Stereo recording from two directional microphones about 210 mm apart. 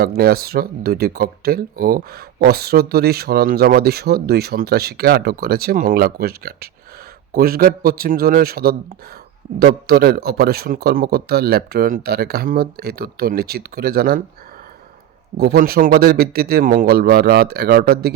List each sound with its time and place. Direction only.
0.0 s speech: 45° right (ahead or behind)
15.4 s speech: 45° right (ahead or behind)